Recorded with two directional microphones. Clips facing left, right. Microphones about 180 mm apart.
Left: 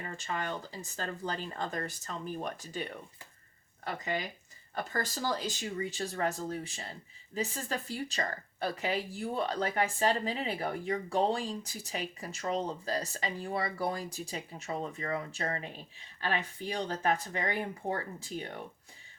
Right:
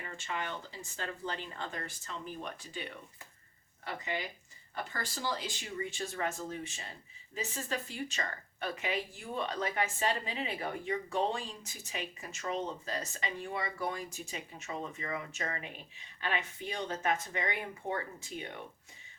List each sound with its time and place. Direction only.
0.0 s speech: 40° left (ahead or behind)
4.0 s speech: 45° left (ahead or behind)